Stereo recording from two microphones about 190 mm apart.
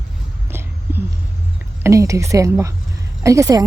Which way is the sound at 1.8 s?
15° right (ahead or behind).